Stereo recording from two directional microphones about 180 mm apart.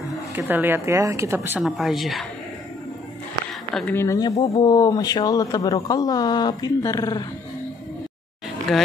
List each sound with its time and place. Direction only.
0.4 s speech: 10° right (ahead or behind)
1.6 s speech: centre (ahead or behind)
3.7 s speech: 10° left (ahead or behind)